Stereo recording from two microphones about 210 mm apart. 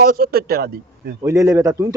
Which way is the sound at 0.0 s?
45° right (ahead or behind).